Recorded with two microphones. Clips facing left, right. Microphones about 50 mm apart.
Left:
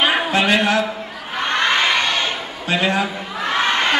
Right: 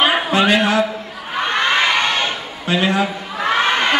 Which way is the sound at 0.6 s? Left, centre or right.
Centre.